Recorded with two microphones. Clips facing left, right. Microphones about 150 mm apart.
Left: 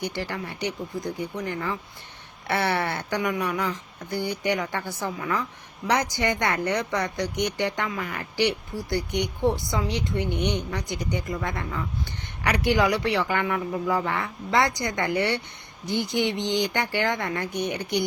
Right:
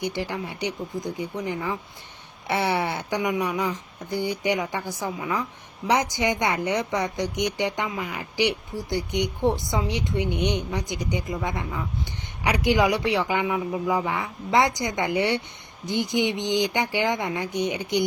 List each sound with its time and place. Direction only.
0.0 s a woman's voice: 15° right (ahead or behind)